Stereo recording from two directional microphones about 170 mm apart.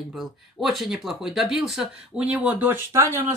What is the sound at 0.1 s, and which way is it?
Speech, centre (ahead or behind).